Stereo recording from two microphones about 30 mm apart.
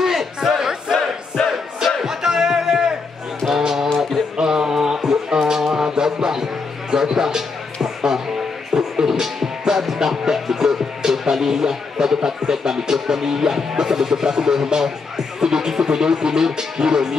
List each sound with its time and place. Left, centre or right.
0.0 s crowd: centre
0.9 s battle cry: centre
2.0 s music: centre
4.4 s a sound: centre
5.7 s music: centre
11.3 s speech: centre